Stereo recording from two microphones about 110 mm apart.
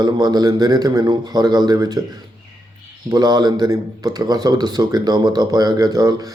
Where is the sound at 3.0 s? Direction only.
40° right (ahead or behind).